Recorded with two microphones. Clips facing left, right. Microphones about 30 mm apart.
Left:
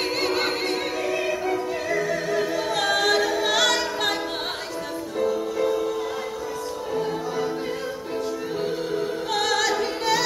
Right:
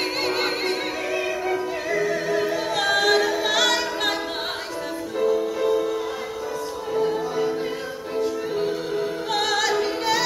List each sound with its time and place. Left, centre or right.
0.2 s music: centre
5.2 s music: centre